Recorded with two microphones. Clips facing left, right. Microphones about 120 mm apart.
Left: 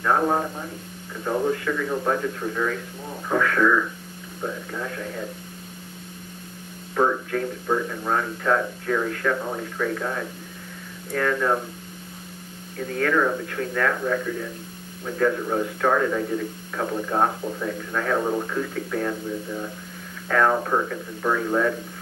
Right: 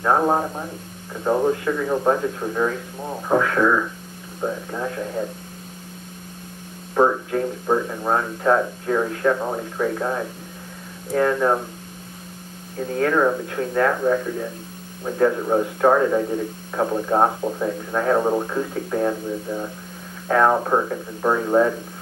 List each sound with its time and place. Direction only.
0.0 s speech: 30° right (ahead or behind)
7.0 s speech: 25° right (ahead or behind)
12.7 s speech: 30° right (ahead or behind)